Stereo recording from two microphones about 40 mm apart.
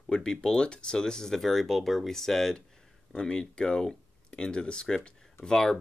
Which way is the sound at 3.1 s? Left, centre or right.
Left.